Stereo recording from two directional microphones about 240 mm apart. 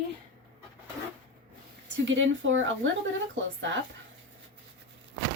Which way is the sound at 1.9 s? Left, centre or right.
Right.